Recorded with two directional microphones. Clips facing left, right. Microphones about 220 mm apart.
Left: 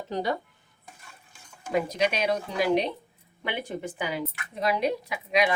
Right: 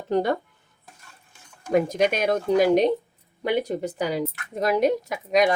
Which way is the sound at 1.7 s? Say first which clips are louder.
Right 5 dB; 50° right (ahead or behind).